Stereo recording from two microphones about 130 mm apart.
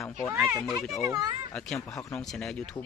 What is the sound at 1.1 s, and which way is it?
Speech, 25° right (ahead or behind).